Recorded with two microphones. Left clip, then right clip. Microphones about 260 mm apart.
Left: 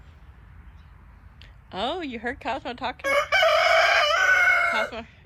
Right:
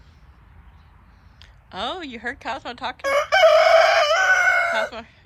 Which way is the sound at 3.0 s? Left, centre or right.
Right.